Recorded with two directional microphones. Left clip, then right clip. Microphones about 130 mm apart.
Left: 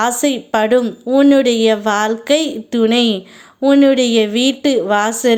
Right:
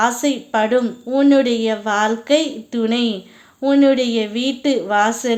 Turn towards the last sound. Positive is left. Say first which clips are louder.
# left 3 dB
turn(degrees=40)  # may be behind; listen again after turning